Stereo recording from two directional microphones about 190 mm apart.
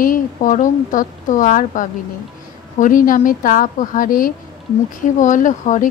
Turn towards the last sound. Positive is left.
turn(degrees=40)  # may be behind; listen again after turning